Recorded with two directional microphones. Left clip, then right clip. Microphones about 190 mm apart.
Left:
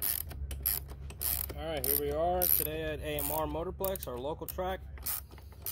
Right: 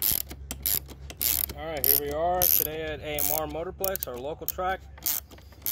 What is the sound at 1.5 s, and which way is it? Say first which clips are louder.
Mechanisms: even; 5° left (ahead or behind).